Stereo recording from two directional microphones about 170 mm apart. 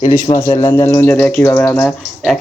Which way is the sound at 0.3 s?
30° left (ahead or behind).